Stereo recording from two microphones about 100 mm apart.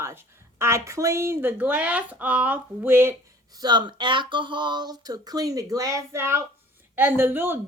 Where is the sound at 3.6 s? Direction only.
45° right (ahead or behind).